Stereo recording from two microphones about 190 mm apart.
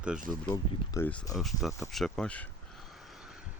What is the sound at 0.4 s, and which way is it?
Speech, 15° left (ahead or behind).